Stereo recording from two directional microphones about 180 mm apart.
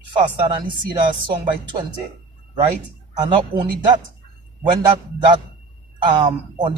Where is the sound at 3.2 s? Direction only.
25° right (ahead or behind).